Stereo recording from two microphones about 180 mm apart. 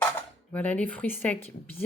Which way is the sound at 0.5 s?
10° left (ahead or behind).